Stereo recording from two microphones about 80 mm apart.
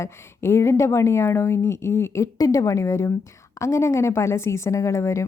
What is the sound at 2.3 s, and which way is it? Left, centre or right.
Speech, left.